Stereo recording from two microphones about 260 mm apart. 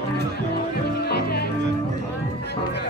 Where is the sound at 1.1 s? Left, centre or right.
Left.